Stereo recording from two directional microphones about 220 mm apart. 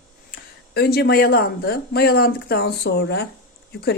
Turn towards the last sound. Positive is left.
turn(degrees=45)  # may be behind; listen again after turning